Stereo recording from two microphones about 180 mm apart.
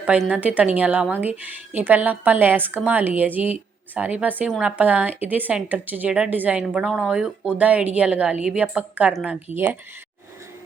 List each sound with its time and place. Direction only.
0.3 s a woman's voice: 10° right (ahead or behind)